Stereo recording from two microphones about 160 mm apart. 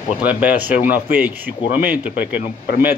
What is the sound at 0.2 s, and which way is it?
Speech, 10° right (ahead or behind).